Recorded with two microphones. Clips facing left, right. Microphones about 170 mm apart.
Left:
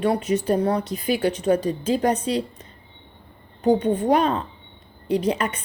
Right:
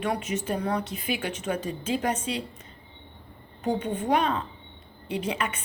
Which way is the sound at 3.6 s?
35° left (ahead or behind).